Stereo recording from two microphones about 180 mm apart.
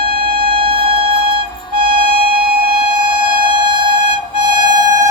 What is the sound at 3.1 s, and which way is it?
Music, 30° right (ahead or behind).